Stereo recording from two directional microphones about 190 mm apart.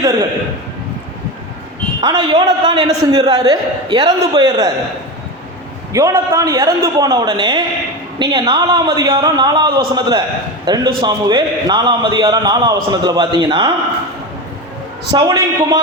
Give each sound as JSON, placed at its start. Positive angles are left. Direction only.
{"t": 2.0, "sound": "a man's voice", "side_deg": -25}
{"t": 5.9, "sound": "a man's voice", "side_deg": -15}
{"t": 15.1, "sound": "a man's voice", "side_deg": -20}